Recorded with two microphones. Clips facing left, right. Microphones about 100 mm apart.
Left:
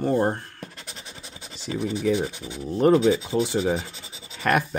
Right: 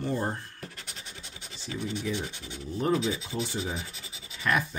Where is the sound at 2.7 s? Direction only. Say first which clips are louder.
Left 9 dB; 65° left (ahead or behind).